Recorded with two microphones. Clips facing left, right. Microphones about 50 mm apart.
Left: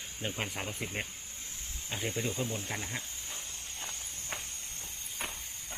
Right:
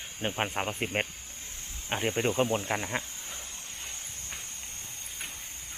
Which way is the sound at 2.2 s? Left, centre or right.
Right.